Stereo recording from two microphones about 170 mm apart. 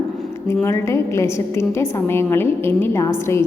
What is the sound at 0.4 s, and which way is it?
A woman's voice, 15° left (ahead or behind).